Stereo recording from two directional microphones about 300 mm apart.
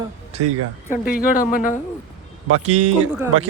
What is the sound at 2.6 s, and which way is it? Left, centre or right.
Speech, right.